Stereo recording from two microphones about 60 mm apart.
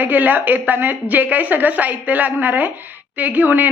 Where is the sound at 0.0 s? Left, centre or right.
Right.